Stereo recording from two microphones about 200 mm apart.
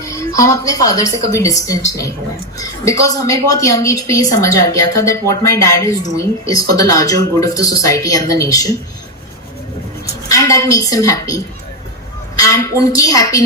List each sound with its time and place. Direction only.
0.0 s a woman's voice: 15° left (ahead or behind)
10.2 s a woman's voice: 15° left (ahead or behind)
12.4 s a woman's voice: 15° left (ahead or behind)